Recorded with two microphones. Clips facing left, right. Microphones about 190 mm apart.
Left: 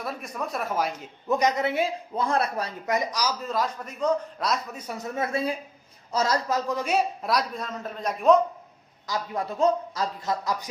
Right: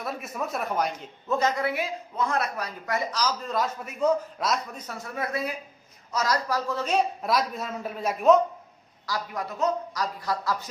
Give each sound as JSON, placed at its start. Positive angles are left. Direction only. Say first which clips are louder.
{"t": 0.0, "sound": "a man's voice", "louder": "even", "side_deg": 0}
{"t": 1.3, "sound": "speech", "louder": "left 2 dB", "side_deg": 15}
{"t": 7.2, "sound": "a man's voice", "louder": "right 1 dB", "side_deg": 0}
{"t": 9.0, "sound": "speech", "louder": "left 2 dB", "side_deg": 25}